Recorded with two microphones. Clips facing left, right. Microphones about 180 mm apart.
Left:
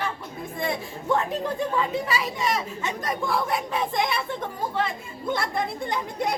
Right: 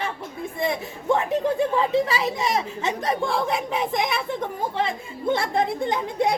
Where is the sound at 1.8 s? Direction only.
25° right (ahead or behind).